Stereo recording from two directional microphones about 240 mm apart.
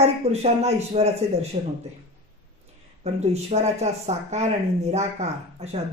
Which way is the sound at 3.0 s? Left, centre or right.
Right.